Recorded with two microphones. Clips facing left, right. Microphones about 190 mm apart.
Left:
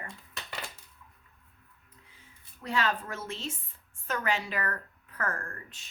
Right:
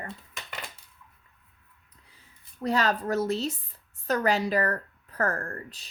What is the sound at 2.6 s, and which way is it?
A woman's voice, 40° right (ahead or behind).